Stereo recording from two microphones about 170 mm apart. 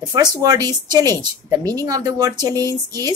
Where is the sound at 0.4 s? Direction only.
20° right (ahead or behind).